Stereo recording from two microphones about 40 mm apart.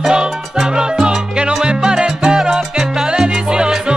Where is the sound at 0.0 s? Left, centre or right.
Centre.